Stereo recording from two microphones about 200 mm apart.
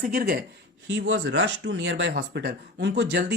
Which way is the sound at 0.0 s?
45° right (ahead or behind).